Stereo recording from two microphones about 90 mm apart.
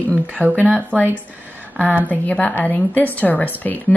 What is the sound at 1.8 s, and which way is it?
Speech, 20° right (ahead or behind).